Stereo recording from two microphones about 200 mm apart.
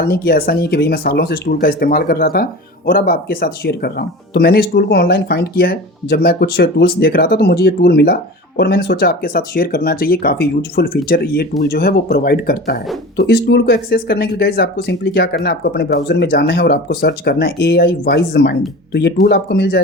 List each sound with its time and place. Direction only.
0.0 s speech: 50° left (ahead or behind)